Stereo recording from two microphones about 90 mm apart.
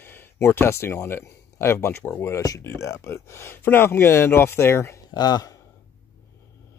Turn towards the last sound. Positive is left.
turn(degrees=45)  # may be behind; listen again after turning